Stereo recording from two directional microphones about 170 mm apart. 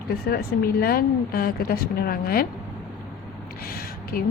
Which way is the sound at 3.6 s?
60° left (ahead or behind).